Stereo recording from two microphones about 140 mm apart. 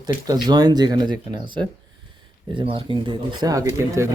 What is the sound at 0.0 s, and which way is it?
Speech, 30° right (ahead or behind).